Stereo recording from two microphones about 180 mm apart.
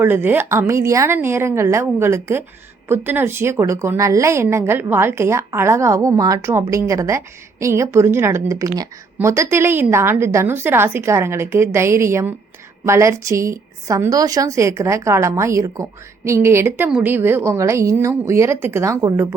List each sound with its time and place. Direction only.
0.0 s a woman's voice: 10° right (ahead or behind)